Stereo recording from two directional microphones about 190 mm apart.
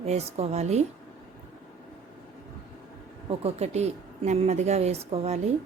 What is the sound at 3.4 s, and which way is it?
Speech, 35° right (ahead or behind).